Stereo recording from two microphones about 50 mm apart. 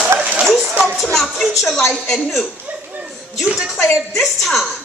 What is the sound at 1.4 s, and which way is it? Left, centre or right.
Speech, centre.